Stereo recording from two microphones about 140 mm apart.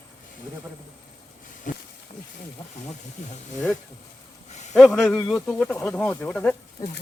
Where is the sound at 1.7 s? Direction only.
65° left (ahead or behind).